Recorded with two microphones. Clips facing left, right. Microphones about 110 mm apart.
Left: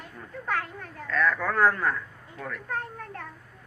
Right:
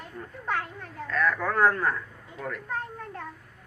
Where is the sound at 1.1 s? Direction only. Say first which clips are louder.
Left 1 dB; 15° right (ahead or behind).